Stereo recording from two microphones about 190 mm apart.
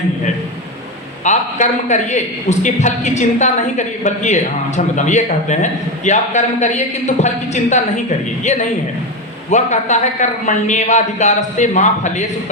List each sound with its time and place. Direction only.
1.2 s a man's voice: 40° left (ahead or behind)